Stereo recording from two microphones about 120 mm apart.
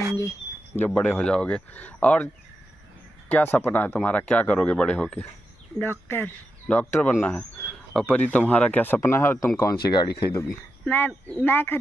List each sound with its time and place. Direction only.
0.2 s speech: 20° left (ahead or behind)
3.5 s speech: 15° left (ahead or behind)
9.6 s speech: 30° left (ahead or behind)
10.9 s speech: 15° left (ahead or behind)